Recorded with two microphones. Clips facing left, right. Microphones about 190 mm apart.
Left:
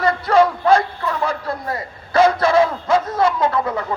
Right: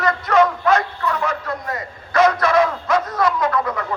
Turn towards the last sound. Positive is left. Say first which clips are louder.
# left 1 dB
turn(degrees=30)  # may be behind; listen again after turning